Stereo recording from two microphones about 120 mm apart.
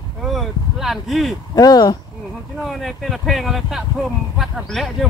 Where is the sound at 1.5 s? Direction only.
30° left (ahead or behind).